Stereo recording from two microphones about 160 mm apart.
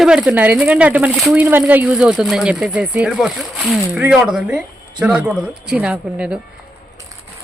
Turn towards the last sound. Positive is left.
turn(degrees=-5)  # may be behind; listen again after turning